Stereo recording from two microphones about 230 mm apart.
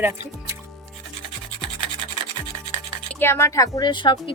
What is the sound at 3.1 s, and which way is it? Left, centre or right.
Speech, centre.